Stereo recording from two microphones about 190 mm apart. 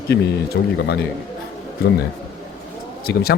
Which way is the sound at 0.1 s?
60° left (ahead or behind).